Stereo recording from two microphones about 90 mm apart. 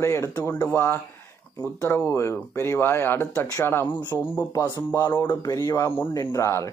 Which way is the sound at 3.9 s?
60° left (ahead or behind).